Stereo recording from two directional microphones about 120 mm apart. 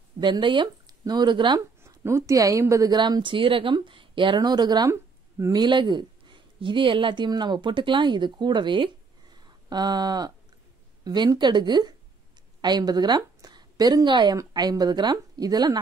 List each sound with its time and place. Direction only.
0.2 s speech: 40° right (ahead or behind)
1.8 s a woman's voice: 25° right (ahead or behind)